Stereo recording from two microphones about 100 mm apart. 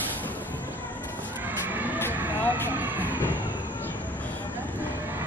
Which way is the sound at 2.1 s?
20° right (ahead or behind).